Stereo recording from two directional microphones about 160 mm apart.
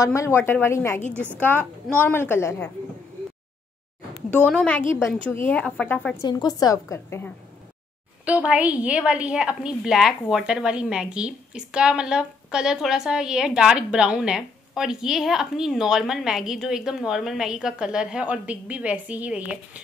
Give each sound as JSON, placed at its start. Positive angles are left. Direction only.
{"t": 0.0, "sound": "speech", "side_deg": 20}
{"t": 4.5, "sound": "speech", "side_deg": 5}
{"t": 6.2, "sound": "a woman's voice", "side_deg": 25}
{"t": 8.3, "sound": "a woman's voice", "side_deg": -10}